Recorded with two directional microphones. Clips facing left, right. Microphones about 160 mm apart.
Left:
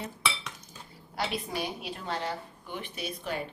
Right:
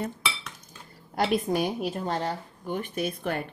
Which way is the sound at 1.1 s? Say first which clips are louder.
Right 8 dB; 50° right (ahead or behind).